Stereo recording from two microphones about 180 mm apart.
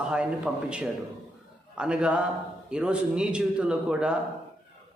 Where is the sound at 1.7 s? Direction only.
5° right (ahead or behind).